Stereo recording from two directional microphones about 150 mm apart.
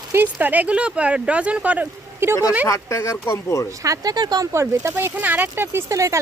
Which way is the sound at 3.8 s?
25° right (ahead or behind).